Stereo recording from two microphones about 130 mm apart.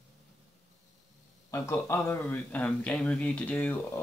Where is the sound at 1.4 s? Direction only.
20° left (ahead or behind).